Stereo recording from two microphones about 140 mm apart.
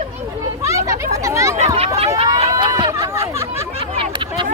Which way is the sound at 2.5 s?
30° right (ahead or behind).